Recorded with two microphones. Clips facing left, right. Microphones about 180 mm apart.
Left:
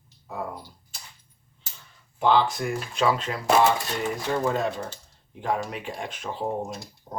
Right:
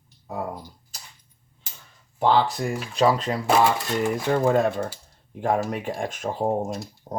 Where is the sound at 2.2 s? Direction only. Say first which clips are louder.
Right 1 dB; 35° right (ahead or behind).